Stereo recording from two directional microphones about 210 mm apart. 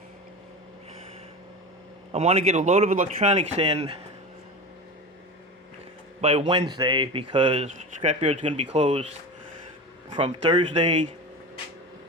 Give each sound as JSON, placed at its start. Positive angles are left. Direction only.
{"t": 2.1, "sound": "a man's voice", "side_deg": -30}
{"t": 6.2, "sound": "a man's voice", "side_deg": -30}
{"t": 10.1, "sound": "speech", "side_deg": -25}